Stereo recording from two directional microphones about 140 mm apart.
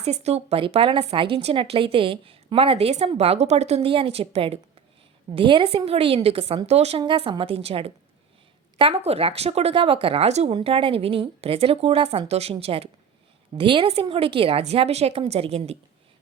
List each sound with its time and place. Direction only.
0.0 s speech: 50° right (ahead or behind)
7.0 s speech: 35° right (ahead or behind)